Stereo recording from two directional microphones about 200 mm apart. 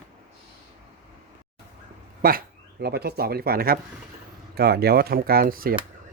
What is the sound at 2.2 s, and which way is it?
Speech, 45° right (ahead or behind).